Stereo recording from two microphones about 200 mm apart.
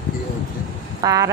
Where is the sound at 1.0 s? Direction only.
15° right (ahead or behind).